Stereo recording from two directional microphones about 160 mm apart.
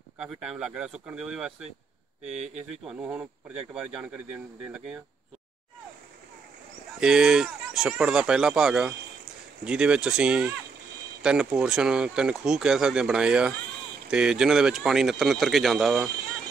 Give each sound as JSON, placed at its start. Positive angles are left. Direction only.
{"t": 0.2, "sound": "speech", "side_deg": -5}
{"t": 2.3, "sound": "speech", "side_deg": -45}
{"t": 3.0, "sound": "speech", "side_deg": -10}
{"t": 7.0, "sound": "speech", "side_deg": -5}